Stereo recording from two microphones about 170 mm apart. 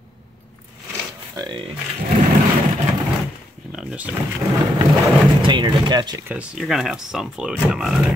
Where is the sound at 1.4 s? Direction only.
25° right (ahead or behind).